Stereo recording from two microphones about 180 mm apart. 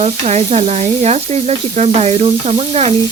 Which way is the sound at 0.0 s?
35° right (ahead or behind).